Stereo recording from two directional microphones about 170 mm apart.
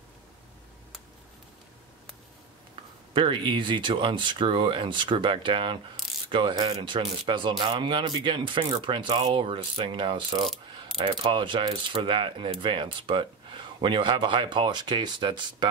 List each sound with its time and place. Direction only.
2.7 s speech: 30° right (ahead or behind)